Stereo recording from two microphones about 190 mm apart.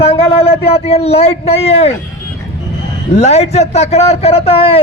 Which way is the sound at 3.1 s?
35° left (ahead or behind).